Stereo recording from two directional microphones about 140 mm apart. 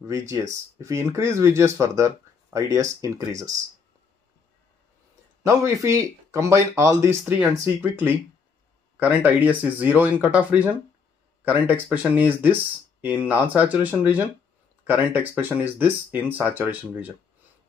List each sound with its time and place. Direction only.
0.0 s speech: 20° right (ahead or behind)
5.4 s speech: 20° right (ahead or behind)